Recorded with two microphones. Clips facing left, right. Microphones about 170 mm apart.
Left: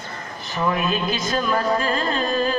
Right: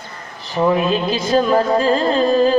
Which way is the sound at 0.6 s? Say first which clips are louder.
Right 6 dB; 30° right (ahead or behind).